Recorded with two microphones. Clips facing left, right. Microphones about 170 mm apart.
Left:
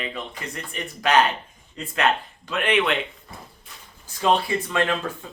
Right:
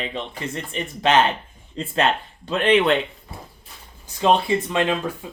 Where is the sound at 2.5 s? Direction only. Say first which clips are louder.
Right 5 dB; 30° right (ahead or behind).